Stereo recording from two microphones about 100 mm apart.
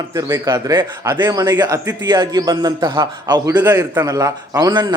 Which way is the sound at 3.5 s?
25° right (ahead or behind).